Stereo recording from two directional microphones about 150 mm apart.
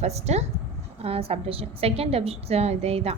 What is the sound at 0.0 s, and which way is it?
A woman's voice, 45° right (ahead or behind).